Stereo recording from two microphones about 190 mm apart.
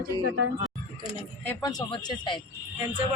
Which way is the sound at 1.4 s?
20° left (ahead or behind).